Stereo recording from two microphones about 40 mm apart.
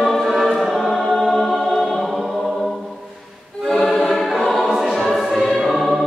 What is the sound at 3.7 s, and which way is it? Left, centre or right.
Choir, centre.